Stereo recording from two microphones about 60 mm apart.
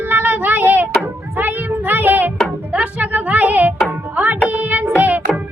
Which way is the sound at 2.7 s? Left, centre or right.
Right.